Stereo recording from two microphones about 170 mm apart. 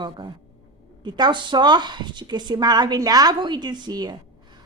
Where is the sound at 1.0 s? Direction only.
25° right (ahead or behind).